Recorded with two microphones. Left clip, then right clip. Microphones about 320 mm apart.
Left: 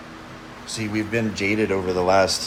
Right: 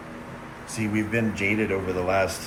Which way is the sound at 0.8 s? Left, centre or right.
Left.